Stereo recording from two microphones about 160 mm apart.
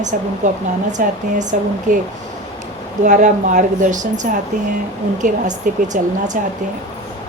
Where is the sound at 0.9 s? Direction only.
50° right (ahead or behind).